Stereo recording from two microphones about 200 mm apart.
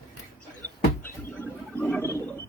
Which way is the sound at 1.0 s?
10° left (ahead or behind).